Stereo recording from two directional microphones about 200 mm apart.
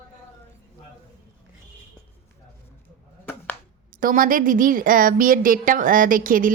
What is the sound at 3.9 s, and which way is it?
A woman's voice, 45° right (ahead or behind).